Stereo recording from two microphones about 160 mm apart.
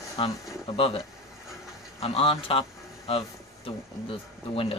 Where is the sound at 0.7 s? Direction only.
35° left (ahead or behind).